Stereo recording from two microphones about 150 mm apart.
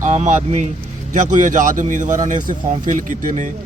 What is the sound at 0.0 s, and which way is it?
A man's voice, 50° right (ahead or behind).